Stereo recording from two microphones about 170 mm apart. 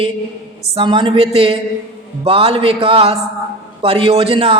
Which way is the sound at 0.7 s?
30° right (ahead or behind).